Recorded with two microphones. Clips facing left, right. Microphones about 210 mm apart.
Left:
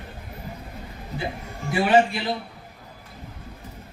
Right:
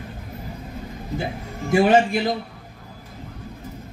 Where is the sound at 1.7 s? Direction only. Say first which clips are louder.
Right 3 dB; 45° right (ahead or behind).